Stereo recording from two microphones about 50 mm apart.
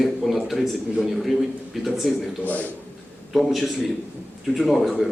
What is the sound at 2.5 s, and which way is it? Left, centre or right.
Speech, left.